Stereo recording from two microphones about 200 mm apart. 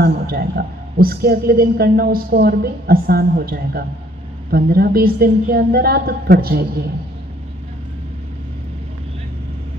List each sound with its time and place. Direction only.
0.0 s a woman's voice: 50° right (ahead or behind)